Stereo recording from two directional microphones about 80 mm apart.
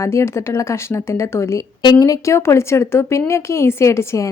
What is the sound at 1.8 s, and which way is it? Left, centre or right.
Speech, left.